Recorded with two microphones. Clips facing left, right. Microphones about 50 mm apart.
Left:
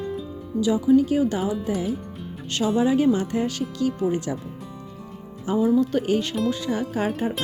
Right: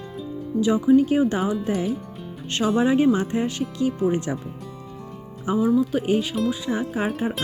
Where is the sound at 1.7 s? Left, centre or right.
Right.